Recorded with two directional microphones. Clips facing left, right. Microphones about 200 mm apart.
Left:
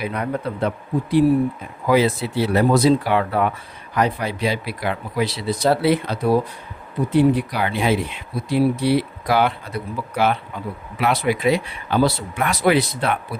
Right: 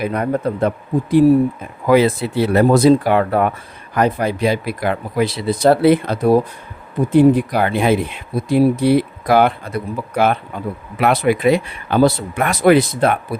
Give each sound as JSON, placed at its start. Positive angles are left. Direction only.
{"t": 0.0, "sound": "speech", "side_deg": -45}
{"t": 1.9, "sound": "speech", "side_deg": -55}